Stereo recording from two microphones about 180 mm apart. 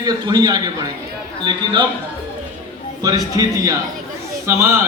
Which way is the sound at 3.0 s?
20° right (ahead or behind).